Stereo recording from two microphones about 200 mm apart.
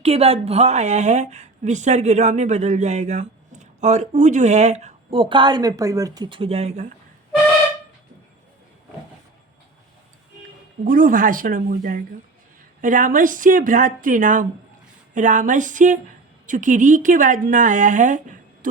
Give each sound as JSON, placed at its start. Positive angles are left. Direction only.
{"t": 0.0, "sound": "speech", "side_deg": -30}
{"t": 10.8, "sound": "speech", "side_deg": -45}